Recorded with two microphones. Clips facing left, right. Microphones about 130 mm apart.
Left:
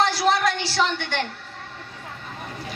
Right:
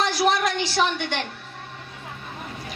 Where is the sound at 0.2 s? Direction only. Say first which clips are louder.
Even; 20° right (ahead or behind).